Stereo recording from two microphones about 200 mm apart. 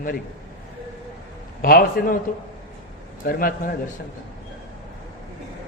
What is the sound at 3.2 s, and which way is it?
Speech, 45° left (ahead or behind).